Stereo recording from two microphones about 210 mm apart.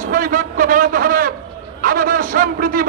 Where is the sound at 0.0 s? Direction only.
40° right (ahead or behind).